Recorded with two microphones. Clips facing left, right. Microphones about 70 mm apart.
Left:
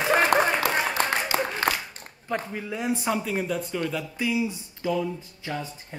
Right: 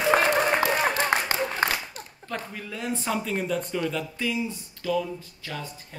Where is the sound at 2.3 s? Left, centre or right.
Centre.